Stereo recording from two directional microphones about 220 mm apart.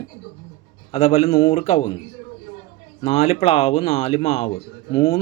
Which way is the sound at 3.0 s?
30° left (ahead or behind).